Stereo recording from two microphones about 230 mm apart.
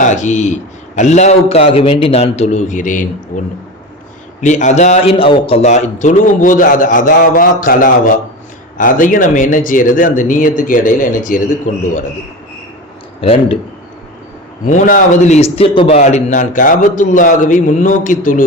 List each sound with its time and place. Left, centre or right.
0.0 s a man's voice: left
13.2 s speech: left
14.7 s a man's voice: left